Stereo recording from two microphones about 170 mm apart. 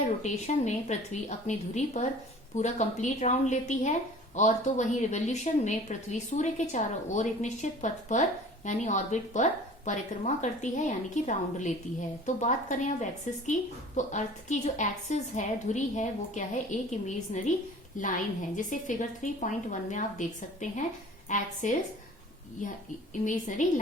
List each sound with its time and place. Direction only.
0.2 s a woman's voice: 45° left (ahead or behind)